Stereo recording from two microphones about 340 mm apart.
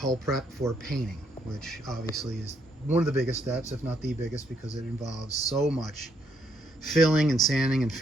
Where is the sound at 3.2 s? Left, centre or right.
Centre.